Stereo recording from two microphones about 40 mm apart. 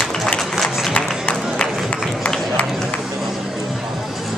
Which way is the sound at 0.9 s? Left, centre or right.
Left.